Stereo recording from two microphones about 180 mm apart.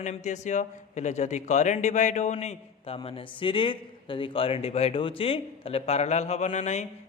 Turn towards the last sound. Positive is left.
turn(degrees=40)  # may be behind; listen again after turning